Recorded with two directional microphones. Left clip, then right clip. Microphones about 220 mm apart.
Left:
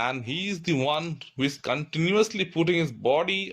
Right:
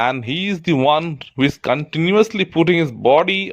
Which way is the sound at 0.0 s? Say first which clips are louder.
Right 9 dB; 40° right (ahead or behind).